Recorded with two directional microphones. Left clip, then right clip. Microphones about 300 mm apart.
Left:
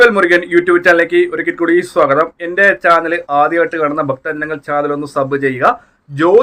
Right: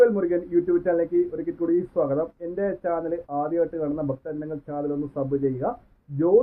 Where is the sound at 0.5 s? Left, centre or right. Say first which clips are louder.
Left 10 dB; centre.